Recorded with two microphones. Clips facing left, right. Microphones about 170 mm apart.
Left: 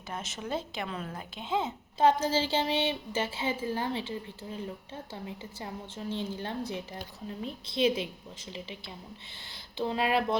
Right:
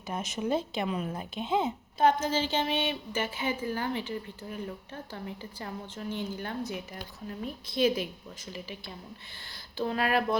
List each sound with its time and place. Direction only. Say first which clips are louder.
0.1 s speech: right 5 dB; 15° right (ahead or behind)
2.0 s a woman's voice: left 1 dB; 30° left (ahead or behind)